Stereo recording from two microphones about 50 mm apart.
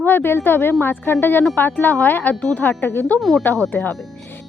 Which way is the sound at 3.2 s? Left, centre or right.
Centre.